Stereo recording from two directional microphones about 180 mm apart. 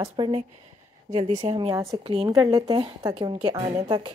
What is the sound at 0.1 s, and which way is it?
A woman's voice, 30° right (ahead or behind).